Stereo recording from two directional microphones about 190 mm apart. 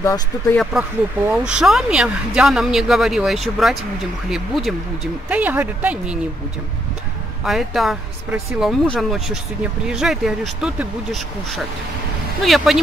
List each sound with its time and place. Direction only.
0.0 s speech: 15° left (ahead or behind)
1.3 s speech: 5° right (ahead or behind)
7.4 s speech: centre (ahead or behind)